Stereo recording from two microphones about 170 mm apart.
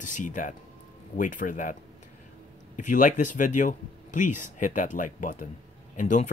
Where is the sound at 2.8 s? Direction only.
50° left (ahead or behind).